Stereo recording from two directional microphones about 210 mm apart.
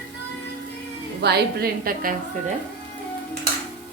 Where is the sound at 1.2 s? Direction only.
50° right (ahead or behind).